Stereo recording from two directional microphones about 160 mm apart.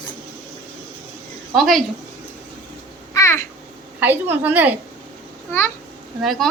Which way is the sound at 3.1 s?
20° left (ahead or behind).